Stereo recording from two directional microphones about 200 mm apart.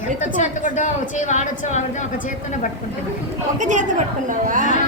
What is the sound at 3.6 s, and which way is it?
A woman's voice, 40° right (ahead or behind).